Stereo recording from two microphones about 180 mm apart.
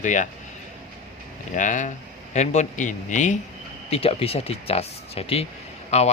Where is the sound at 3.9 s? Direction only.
30° left (ahead or behind).